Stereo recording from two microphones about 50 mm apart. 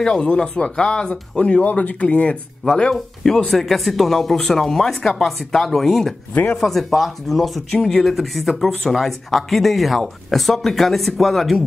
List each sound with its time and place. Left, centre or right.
0.0 s speech: centre
2.9 s speech: centre
6.3 s speech: left
6.6 s speech: centre